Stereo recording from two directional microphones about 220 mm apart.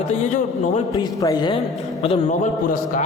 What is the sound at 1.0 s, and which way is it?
Speech, 15° left (ahead or behind).